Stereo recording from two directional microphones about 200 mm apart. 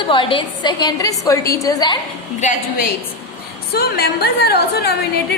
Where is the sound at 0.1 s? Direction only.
25° left (ahead or behind).